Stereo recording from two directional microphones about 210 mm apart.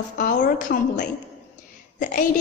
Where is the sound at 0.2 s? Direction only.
40° left (ahead or behind).